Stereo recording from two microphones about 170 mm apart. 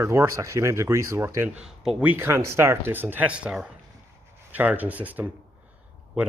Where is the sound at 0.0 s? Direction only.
15° right (ahead or behind).